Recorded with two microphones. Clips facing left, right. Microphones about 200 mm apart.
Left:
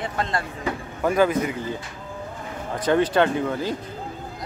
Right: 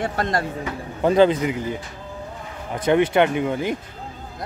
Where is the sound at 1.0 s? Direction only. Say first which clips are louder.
Right 4 dB; 25° right (ahead or behind).